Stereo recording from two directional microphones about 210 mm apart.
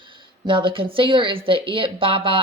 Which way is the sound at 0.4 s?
25° right (ahead or behind).